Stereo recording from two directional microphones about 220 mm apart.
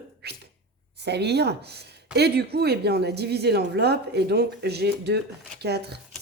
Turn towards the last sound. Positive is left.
turn(degrees=-50)  # may be behind; listen again after turning